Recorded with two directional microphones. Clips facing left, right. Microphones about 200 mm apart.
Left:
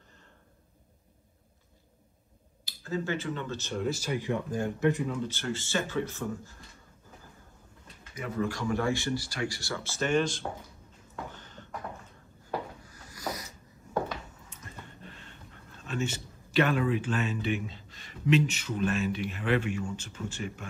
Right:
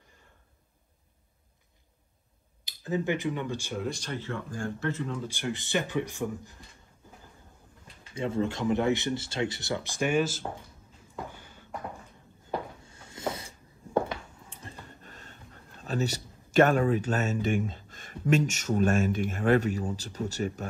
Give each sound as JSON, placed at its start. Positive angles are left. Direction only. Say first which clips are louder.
{"t": 2.6, "sound": "speech", "louder": "right 3 dB", "side_deg": -20}
{"t": 3.8, "sound": "speech", "louder": "left 3 dB", "side_deg": 5}
{"t": 5.3, "sound": "speech", "louder": "right 2 dB", "side_deg": -15}
{"t": 8.1, "sound": "speech", "louder": "right 3 dB", "side_deg": -25}
{"t": 11.3, "sound": "a sound", "louder": "left 2 dB", "side_deg": -10}
{"t": 12.8, "sound": "a sound", "louder": "right 3 dB", "side_deg": -25}
{"t": 14.5, "sound": "speech", "louder": "right 3 dB", "side_deg": -35}